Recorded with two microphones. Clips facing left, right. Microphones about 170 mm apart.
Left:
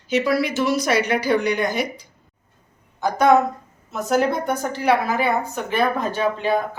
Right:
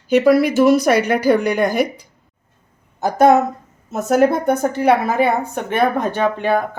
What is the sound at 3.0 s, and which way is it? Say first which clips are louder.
A woman's voice: right 3 dB; 45° right (ahead or behind).